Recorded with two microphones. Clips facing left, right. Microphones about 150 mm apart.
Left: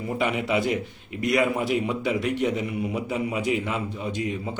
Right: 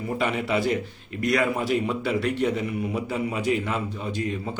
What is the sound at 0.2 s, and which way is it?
A man's voice, 15° left (ahead or behind).